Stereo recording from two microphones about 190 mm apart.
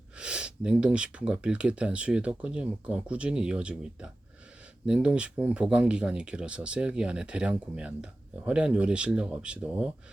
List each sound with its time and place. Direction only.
0.2 s speech: 5° right (ahead or behind)